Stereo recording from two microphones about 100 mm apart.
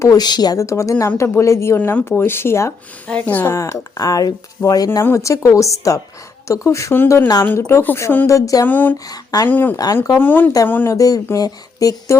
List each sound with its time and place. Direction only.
0.0 s speech: 40° left (ahead or behind)
3.1 s speech: 15° left (ahead or behind)
3.5 s speech: 30° left (ahead or behind)
4.9 s speech: 25° left (ahead or behind)
8.6 s speech: 20° left (ahead or behind)
9.0 s speech: 35° left (ahead or behind)
9.5 s speech: 15° left (ahead or behind)
9.7 s speech: 35° left (ahead or behind)
10.2 s speech: 20° left (ahead or behind)
10.8 s speech: 35° left (ahead or behind)